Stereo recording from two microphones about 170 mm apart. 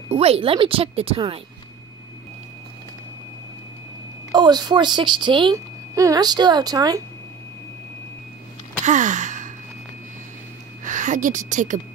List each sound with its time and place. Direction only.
0.1 s speech: 35° right (ahead or behind)
4.3 s a woman's voice: 25° right (ahead or behind)
8.8 s a sound: 45° right (ahead or behind)
10.8 s a woman's voice: 45° right (ahead or behind)